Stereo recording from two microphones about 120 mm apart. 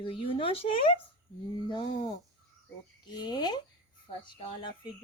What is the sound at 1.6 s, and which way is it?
Speech, 40° left (ahead or behind).